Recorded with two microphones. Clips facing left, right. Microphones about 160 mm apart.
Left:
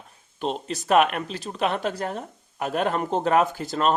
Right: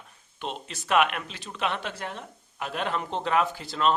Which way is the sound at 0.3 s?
40° left (ahead or behind).